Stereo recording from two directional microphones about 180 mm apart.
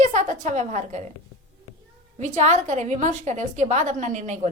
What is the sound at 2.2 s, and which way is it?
A woman's voice, 40° right (ahead or behind).